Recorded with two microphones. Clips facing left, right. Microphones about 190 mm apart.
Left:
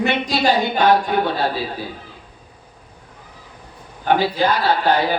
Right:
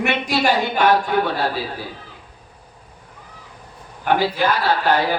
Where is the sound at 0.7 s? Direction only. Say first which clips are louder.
Left 1 dB; 15° left (ahead or behind).